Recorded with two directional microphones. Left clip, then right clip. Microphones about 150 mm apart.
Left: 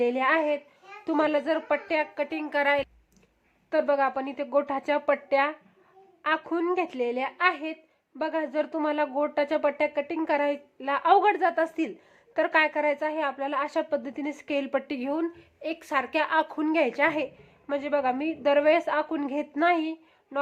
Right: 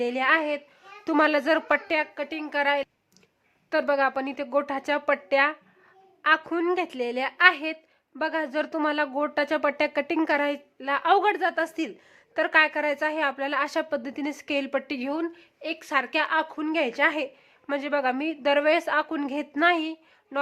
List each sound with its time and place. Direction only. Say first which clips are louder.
0.0 s a woman's voice: right 1 dB; 5° left (ahead or behind)
1.0 s speech: right 3 dB; 15° right (ahead or behind)
1.9 s a woman's voice: even; 5° right (ahead or behind)
10.8 s a woman's voice: even; centre (ahead or behind)